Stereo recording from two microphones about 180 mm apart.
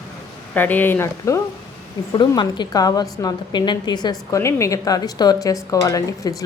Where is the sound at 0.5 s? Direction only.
10° left (ahead or behind).